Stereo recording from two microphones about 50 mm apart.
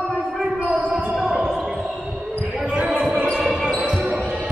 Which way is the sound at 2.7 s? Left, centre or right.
Right.